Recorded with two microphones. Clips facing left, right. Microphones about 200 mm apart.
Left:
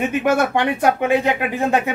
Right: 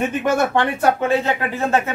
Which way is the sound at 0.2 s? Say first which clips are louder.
Left 1 dB; 15° left (ahead or behind).